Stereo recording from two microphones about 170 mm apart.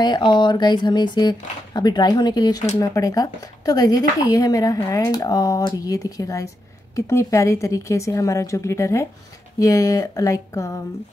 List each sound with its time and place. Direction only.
0.0 s a woman's voice: 25° left (ahead or behind)